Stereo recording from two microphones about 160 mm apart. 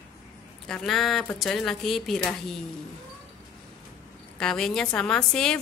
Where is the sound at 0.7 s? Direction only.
5° left (ahead or behind).